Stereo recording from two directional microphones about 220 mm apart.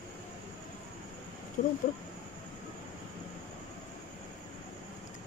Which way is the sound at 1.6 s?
35° left (ahead or behind).